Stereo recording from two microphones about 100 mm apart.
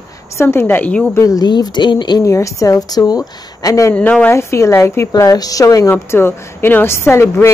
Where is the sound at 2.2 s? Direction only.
30° left (ahead or behind).